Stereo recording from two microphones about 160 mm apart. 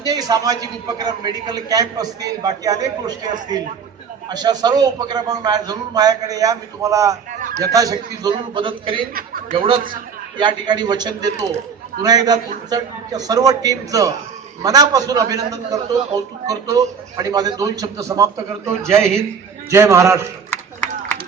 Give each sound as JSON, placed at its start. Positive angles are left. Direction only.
{"t": 0.0, "sound": "a man's voice", "side_deg": -25}
{"t": 9.1, "sound": "chuckle", "side_deg": -65}
{"t": 9.6, "sound": "a man's voice", "side_deg": -30}